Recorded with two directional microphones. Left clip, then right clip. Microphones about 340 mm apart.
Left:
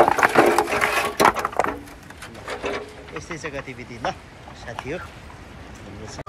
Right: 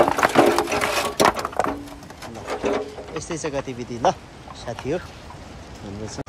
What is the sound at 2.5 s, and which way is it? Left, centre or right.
Sewing machine, right.